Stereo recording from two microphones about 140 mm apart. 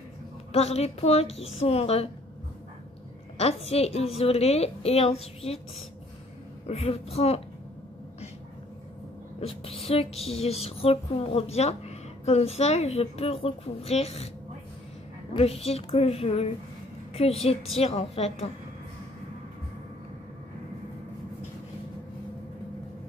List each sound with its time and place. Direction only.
0.5 s speech: 50° left (ahead or behind)
3.3 s speech: 45° left (ahead or behind)
6.7 s speech: 50° left (ahead or behind)
9.4 s speech: 45° left (ahead or behind)
15.3 s speech: 45° left (ahead or behind)